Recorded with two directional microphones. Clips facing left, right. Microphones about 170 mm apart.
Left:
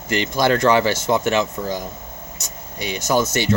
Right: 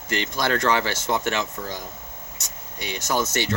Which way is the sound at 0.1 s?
10° left (ahead or behind).